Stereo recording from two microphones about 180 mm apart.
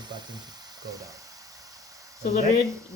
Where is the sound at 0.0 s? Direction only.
25° right (ahead or behind).